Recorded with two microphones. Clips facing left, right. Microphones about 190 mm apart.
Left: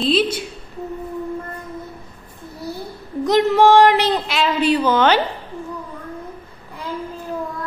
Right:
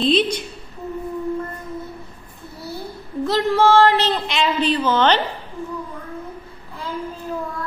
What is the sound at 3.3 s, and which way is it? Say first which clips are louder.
Female singing: left 3 dB; 20° left (ahead or behind).